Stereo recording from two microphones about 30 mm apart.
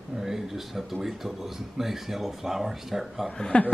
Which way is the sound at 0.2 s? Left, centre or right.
Centre.